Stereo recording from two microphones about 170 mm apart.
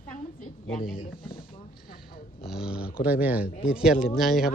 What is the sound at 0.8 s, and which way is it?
Speech, 55° left (ahead or behind).